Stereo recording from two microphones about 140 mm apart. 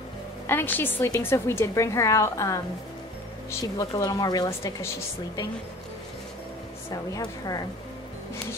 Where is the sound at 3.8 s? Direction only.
30° left (ahead or behind).